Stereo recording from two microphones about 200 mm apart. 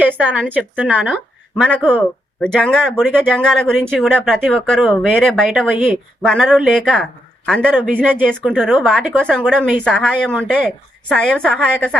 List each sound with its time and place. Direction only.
0.0 s a sound: 10° right (ahead or behind)
0.5 s speech: 10° right (ahead or behind)
2.4 s speech: 5° left (ahead or behind)
6.2 s speech: centre (ahead or behind)
8.4 s speech: 10° right (ahead or behind)
9.6 s speech: 10° right (ahead or behind)
9.8 s speech: 5° left (ahead or behind)
10.3 s speech: 5° right (ahead or behind)
11.1 s speech: 5° left (ahead or behind)